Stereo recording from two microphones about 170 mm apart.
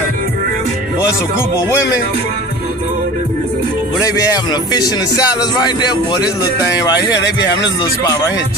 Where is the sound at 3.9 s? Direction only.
20° left (ahead or behind).